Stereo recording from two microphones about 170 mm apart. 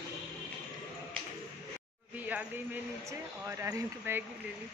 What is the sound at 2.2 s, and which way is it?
Speech, 10° right (ahead or behind).